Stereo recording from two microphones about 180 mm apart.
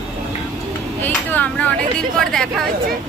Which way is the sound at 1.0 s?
10° left (ahead or behind).